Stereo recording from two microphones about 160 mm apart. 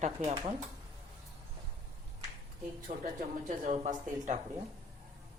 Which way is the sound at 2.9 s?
55° right (ahead or behind).